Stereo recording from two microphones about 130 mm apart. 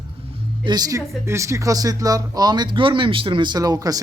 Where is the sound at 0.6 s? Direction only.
30° right (ahead or behind).